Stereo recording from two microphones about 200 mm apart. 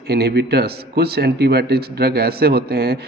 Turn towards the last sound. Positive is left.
turn(degrees=-50)  # may be behind; listen again after turning